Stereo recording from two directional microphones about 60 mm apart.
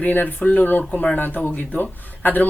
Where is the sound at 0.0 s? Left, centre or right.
Left.